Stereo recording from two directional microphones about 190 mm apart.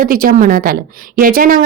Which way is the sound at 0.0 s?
45° right (ahead or behind).